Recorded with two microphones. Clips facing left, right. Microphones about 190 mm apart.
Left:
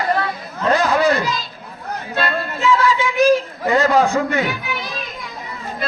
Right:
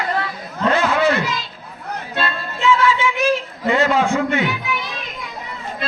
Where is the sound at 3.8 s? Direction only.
40° left (ahead or behind).